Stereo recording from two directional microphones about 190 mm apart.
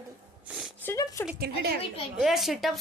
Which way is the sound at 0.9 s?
15° left (ahead or behind).